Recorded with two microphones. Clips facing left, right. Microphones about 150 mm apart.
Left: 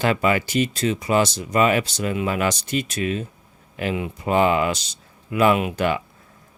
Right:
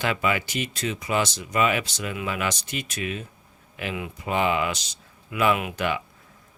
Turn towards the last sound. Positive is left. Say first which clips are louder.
# left 5 dB
turn(degrees=40)  # may be behind; listen again after turning